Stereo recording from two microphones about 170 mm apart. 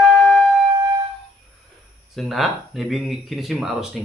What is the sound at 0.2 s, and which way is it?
Flute, 5° left (ahead or behind).